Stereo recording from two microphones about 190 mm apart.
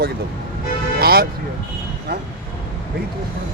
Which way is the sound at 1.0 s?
55° right (ahead or behind).